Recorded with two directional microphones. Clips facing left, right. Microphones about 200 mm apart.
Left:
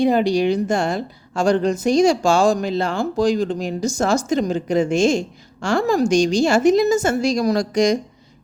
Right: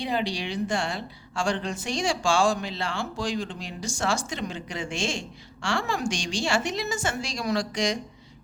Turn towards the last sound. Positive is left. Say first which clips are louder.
# left 9 dB
turn(degrees=45)  # may be behind; listen again after turning